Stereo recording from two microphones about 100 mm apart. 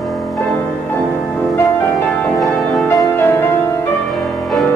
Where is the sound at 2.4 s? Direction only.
Centre (ahead or behind).